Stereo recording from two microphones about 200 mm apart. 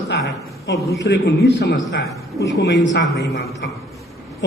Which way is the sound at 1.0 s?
55° left (ahead or behind).